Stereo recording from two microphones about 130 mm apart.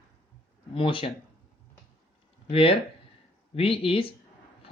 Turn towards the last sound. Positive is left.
turn(degrees=45)  # may be behind; listen again after turning